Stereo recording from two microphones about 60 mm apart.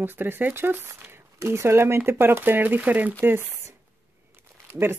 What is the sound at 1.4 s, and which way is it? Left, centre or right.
Speech, right.